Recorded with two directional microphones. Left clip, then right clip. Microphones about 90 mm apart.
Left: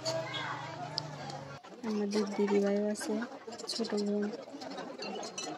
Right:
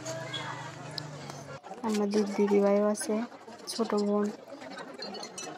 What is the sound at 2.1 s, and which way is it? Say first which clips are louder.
Speech: right 3 dB; 30° left (ahead or behind).